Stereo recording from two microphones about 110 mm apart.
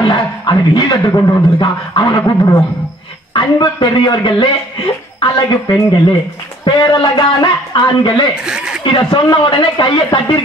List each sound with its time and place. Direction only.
0.0 s speech: 45° left (ahead or behind)
8.5 s speech: 5° right (ahead or behind)
8.8 s speech: 45° left (ahead or behind)